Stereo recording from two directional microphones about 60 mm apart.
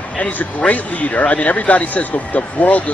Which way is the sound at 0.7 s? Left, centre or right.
Left.